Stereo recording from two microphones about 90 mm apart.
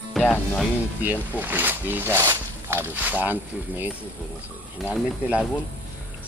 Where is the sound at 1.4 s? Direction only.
20° right (ahead or behind).